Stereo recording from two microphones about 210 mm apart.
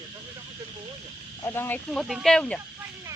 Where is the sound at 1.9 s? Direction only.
Centre (ahead or behind).